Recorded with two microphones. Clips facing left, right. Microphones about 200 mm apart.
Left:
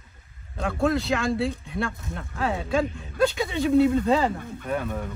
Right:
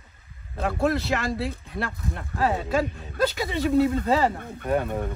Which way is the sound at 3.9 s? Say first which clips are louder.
Left 1 dB; 55° right (ahead or behind).